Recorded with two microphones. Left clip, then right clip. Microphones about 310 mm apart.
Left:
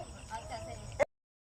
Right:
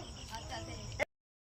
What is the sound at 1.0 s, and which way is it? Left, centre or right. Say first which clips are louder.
Music: left 6 dB; centre.